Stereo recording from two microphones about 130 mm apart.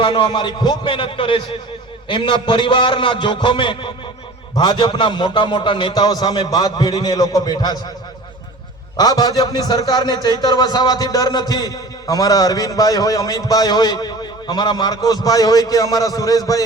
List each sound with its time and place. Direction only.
0.0 s a man's voice: 40° left (ahead or behind)
9.0 s a man's voice: 30° left (ahead or behind)